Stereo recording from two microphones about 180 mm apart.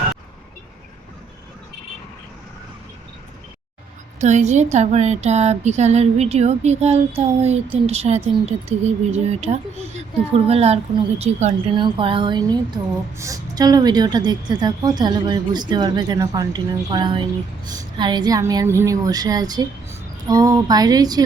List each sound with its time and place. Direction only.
4.2 s a woman's voice: 40° right (ahead or behind)
11.7 s speech: 30° right (ahead or behind)